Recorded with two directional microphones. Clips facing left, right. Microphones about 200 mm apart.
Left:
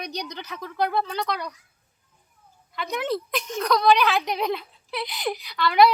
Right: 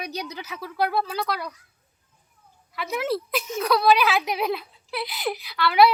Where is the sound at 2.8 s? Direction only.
5° right (ahead or behind).